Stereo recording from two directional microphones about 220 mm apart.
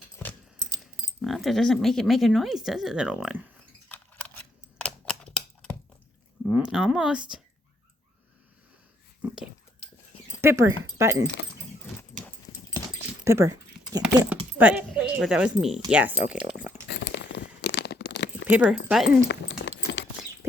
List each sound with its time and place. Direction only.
1.2 s speech: centre (ahead or behind)
3.8 s a sound: 5° left (ahead or behind)
6.4 s speech: 5° right (ahead or behind)
9.2 s speech: 5° right (ahead or behind)
11.9 s dog: 5° left (ahead or behind)
13.2 s dog: 15° right (ahead or behind)
14.6 s speech: 5° right (ahead or behind)
16.9 s a sound: 50° left (ahead or behind)
18.4 s speech: 5° right (ahead or behind)
19.3 s dog: 55° left (ahead or behind)